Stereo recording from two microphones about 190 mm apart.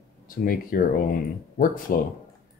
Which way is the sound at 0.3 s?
50° left (ahead or behind).